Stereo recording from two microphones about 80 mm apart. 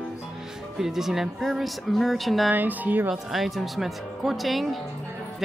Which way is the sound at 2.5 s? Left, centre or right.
Right.